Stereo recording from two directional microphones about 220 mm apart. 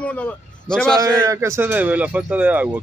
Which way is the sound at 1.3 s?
15° right (ahead or behind).